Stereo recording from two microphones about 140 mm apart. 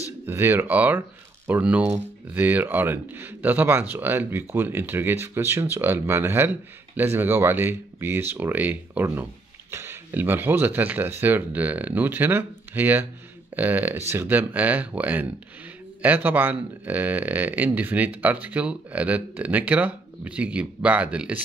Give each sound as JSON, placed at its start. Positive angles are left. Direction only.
{"t": 0.3, "sound": "speech", "side_deg": -15}